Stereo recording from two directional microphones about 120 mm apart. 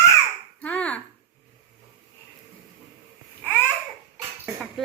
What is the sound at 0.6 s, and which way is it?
Finger snapping, 10° left (ahead or behind).